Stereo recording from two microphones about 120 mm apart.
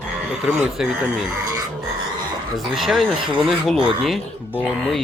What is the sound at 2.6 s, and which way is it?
Speech, centre (ahead or behind).